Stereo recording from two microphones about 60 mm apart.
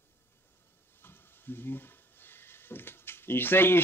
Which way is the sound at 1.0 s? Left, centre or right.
Left.